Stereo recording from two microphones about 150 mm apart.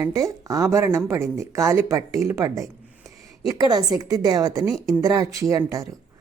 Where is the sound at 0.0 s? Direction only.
20° right (ahead or behind).